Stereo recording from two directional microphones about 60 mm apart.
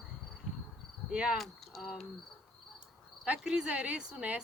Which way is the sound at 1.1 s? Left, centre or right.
Centre.